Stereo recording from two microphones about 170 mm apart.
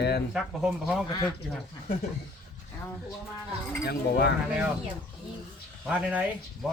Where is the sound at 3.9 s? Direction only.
75° left (ahead or behind).